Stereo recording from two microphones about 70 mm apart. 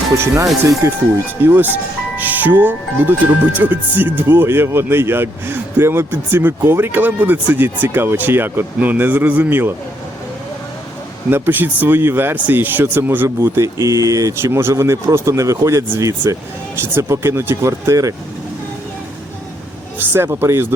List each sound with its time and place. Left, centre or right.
0.8 s speech: right
1.4 s speech: right
11.3 s speech: right
16.8 s speech: right
20.0 s speech: right